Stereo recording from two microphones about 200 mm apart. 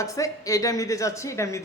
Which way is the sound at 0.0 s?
15° left (ahead or behind).